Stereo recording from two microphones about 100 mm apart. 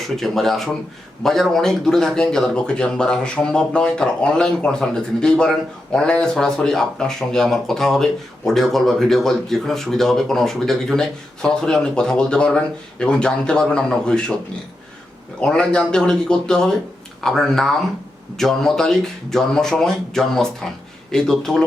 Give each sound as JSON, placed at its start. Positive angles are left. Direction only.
{"t": 0.0, "sound": "speech", "side_deg": 0}
{"t": 15.4, "sound": "speech", "side_deg": 10}